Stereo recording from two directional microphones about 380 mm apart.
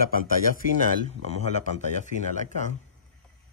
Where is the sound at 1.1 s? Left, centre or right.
Centre.